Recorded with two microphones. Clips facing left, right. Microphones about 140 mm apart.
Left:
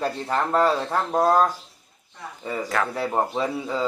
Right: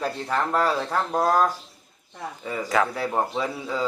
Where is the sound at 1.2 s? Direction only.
20° left (ahead or behind).